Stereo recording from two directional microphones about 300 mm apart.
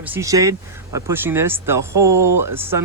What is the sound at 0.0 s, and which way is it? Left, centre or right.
Speech, centre.